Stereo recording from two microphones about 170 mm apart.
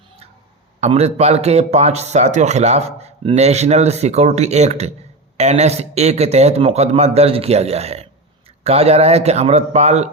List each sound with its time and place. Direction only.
0.8 s a man's voice: 40° right (ahead or behind)